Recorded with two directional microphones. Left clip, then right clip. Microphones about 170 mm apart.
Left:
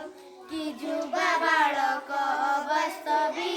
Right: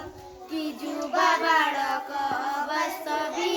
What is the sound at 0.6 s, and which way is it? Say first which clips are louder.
Music: left 1 dB; 20° left (ahead or behind).